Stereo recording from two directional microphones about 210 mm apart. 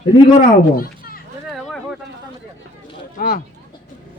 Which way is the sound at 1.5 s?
Centre (ahead or behind).